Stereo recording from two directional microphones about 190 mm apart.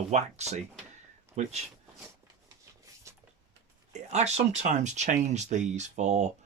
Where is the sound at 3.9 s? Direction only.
35° right (ahead or behind).